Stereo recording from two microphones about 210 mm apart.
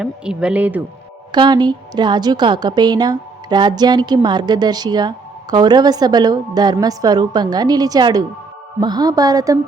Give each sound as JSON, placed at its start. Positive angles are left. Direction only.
{"t": 0.0, "sound": "speech", "side_deg": -5}
{"t": 1.3, "sound": "a woman's voice", "side_deg": -20}